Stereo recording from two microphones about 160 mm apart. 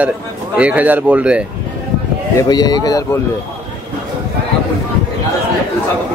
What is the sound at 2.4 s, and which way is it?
Speech, 25° left (ahead or behind).